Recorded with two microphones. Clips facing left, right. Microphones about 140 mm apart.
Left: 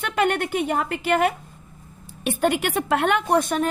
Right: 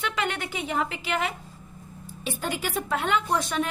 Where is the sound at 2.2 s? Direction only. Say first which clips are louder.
Left 9 dB; 65° left (ahead or behind).